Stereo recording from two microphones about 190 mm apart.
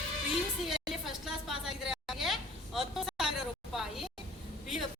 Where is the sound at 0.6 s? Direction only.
Centre (ahead or behind).